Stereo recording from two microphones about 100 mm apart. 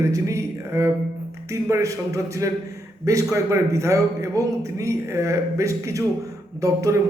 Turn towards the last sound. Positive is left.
turn(degrees=-30)  # may be behind; listen again after turning